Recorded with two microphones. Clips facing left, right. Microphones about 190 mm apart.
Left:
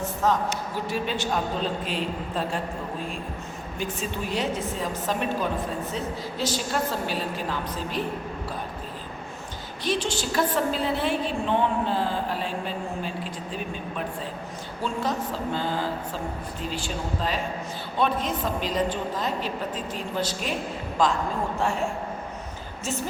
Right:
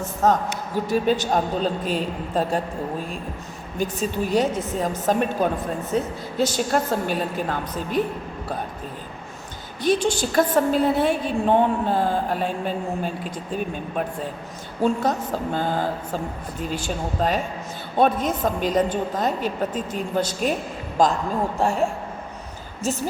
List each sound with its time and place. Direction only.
0.2 s a woman's voice: 45° right (ahead or behind)
3.8 s a woman's voice: 40° right (ahead or behind)
9.8 s a woman's voice: 50° right (ahead or behind)
14.8 s a woman's voice: 50° right (ahead or behind)